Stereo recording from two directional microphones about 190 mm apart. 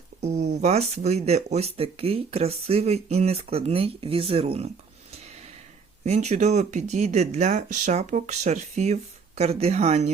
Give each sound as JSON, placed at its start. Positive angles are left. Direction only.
{"t": 0.2, "sound": "speech", "side_deg": -35}
{"t": 6.1, "sound": "speech", "side_deg": -35}